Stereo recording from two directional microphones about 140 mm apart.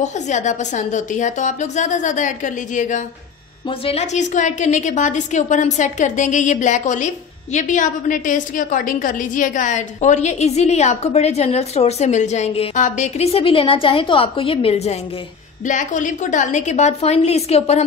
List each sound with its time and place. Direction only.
0.0 s a woman's voice: 60° left (ahead or behind)
3.8 s a woman's voice: 50° left (ahead or behind)
15.6 s a woman's voice: 65° left (ahead or behind); by 17.8 s 50° left (ahead or behind)